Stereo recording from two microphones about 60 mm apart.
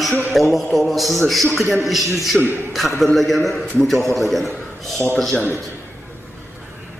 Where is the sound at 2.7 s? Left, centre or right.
Centre.